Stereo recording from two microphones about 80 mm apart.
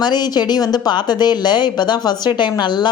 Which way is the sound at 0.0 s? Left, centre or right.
Left.